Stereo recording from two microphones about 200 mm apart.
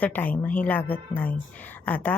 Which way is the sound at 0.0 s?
10° left (ahead or behind).